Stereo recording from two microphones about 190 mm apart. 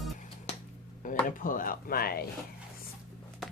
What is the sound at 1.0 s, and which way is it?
Speech, 45° left (ahead or behind).